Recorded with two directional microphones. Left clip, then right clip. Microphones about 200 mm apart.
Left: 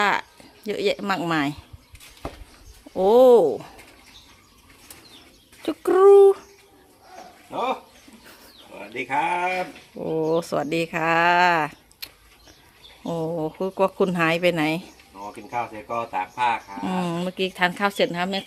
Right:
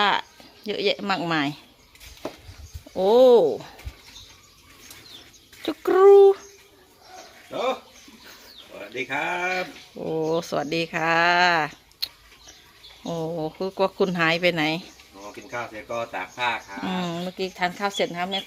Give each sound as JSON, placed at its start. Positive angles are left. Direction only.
{"t": 0.0, "sound": "speech", "side_deg": 10}
{"t": 2.9, "sound": "a sound", "side_deg": 10}
{"t": 5.6, "sound": "a child's voice", "side_deg": 0}
{"t": 9.0, "sound": "speech", "side_deg": -10}
{"t": 9.6, "sound": "a sound", "side_deg": 5}
{"t": 15.9, "sound": "speech", "side_deg": -10}
{"t": 16.8, "sound": "speech", "side_deg": 10}